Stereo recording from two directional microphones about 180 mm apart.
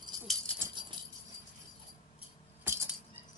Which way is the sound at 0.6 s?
25° right (ahead or behind).